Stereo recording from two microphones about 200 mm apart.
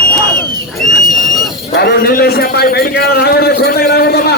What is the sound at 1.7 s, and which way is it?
A man's voice, 50° left (ahead or behind).